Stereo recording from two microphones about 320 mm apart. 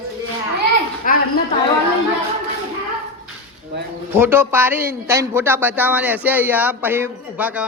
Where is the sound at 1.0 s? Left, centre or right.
Left.